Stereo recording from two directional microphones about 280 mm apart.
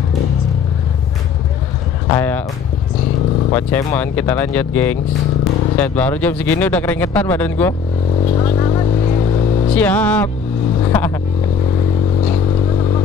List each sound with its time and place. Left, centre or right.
2.0 s vehicle: centre
3.5 s speech: centre
8.4 s vehicle: centre
9.8 s speech: centre
10.9 s vehicle: centre